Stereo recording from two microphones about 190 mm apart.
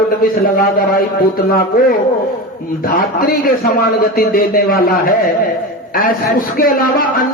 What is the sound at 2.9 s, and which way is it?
A man's voice, 50° left (ahead or behind).